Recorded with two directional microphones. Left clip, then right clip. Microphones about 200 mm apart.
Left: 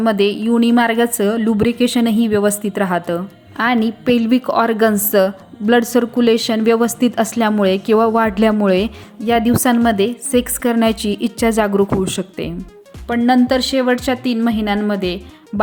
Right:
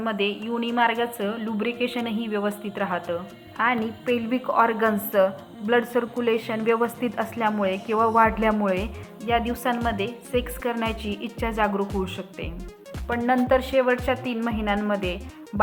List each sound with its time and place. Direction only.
0.0 s a woman's voice: 55° left (ahead or behind)
4.0 s a woman's voice: 35° left (ahead or behind)
13.1 s a woman's voice: 35° left (ahead or behind)